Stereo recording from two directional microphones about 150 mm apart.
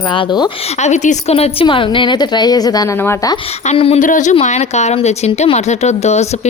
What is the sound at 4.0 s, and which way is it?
Speech, 55° left (ahead or behind).